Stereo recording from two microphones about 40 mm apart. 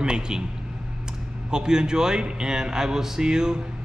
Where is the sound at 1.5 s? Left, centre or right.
Centre.